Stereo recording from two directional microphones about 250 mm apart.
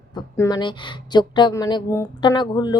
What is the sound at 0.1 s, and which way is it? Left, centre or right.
A woman's voice, centre.